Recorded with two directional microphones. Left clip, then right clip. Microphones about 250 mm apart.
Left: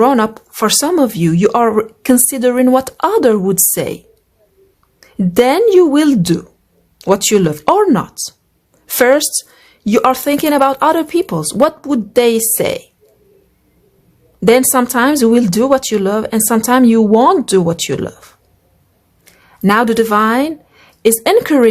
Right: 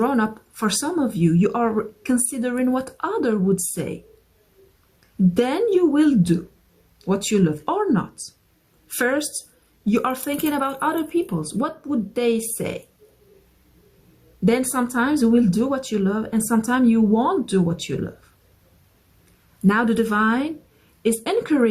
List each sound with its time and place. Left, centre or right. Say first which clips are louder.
0.0 s speech: left 10 dB; left
5.4 s speech: left 11 dB; left
14.4 s speech: left 11 dB; left
19.6 s speech: left 9 dB; left